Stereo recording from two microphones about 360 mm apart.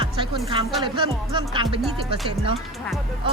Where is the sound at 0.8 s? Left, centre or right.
Centre.